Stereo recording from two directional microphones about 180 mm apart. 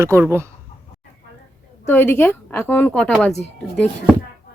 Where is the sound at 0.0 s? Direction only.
15° right (ahead or behind).